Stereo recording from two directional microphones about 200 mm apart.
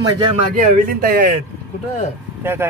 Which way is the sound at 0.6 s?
40° right (ahead or behind).